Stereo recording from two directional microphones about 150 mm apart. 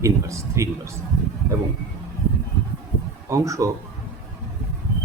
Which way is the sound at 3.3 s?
20° right (ahead or behind).